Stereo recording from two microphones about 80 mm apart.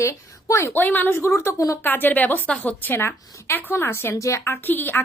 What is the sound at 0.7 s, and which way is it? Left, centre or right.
Speech, left.